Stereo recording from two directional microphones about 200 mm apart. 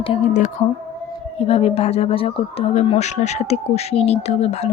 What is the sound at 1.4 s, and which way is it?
Speech, 30° left (ahead or behind).